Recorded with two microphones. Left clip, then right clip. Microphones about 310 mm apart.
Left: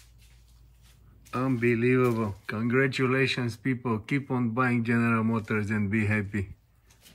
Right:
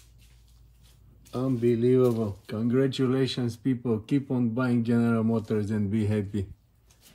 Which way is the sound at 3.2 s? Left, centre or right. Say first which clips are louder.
Left 2 dB; centre.